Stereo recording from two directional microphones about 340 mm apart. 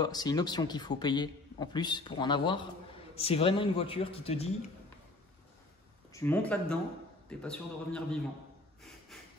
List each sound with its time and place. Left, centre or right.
0.0 s a man's voice: centre
6.1 s a man's voice: centre
9.1 s a sound: centre